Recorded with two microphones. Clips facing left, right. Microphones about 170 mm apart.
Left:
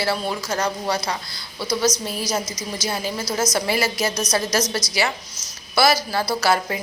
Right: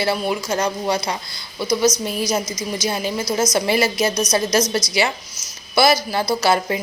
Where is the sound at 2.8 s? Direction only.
20° right (ahead or behind).